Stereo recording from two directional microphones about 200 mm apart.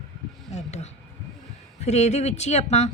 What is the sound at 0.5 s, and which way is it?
A woman's voice, 35° left (ahead or behind).